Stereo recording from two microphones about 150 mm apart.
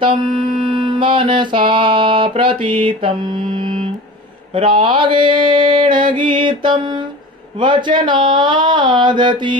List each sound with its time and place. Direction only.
0.7 s music: 35° right (ahead or behind)
4.6 s mantra: 35° right (ahead or behind)
7.6 s a sound: 30° right (ahead or behind)